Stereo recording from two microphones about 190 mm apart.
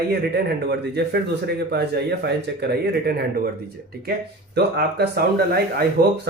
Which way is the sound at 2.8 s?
55° right (ahead or behind).